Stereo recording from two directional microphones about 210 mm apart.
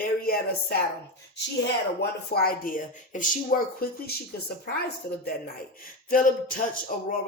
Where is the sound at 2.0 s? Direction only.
45° left (ahead or behind).